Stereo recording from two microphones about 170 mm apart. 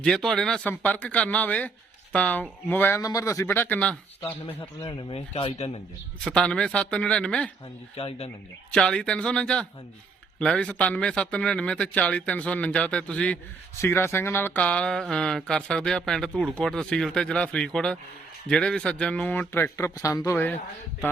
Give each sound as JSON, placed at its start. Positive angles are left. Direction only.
{"t": 0.0, "sound": "speech", "side_deg": 0}
{"t": 4.8, "sound": "speech", "side_deg": 25}
{"t": 5.3, "sound": "speech", "side_deg": 35}
{"t": 6.2, "sound": "speech", "side_deg": 5}
{"t": 7.9, "sound": "speech", "side_deg": 35}
{"t": 8.7, "sound": "speech", "side_deg": 5}